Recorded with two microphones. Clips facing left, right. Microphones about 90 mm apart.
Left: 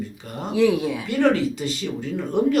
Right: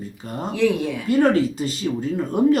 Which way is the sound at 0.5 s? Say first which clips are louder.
Left 2 dB; 15° left (ahead or behind).